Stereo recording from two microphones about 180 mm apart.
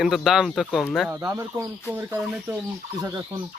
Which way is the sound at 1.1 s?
15° right (ahead or behind).